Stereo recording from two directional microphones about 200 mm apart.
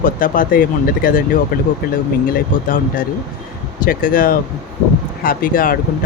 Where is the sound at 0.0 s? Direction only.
45° left (ahead or behind).